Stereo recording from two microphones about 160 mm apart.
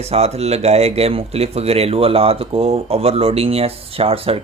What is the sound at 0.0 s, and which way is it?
Speech, 40° right (ahead or behind).